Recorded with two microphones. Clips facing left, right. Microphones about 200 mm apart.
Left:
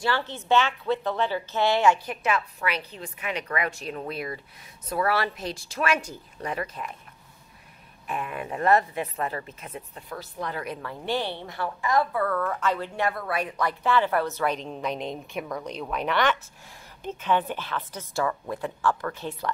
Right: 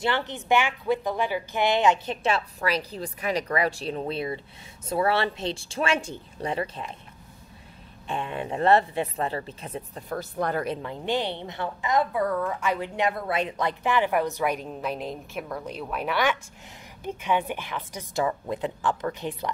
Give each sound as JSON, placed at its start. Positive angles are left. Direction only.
{"t": 0.0, "sound": "speech", "side_deg": -20}
{"t": 8.1, "sound": "speech", "side_deg": -30}
{"t": 10.6, "sound": "a woman's voice", "side_deg": -25}